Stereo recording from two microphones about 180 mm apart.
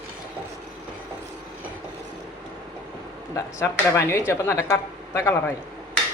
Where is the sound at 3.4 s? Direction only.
15° left (ahead or behind).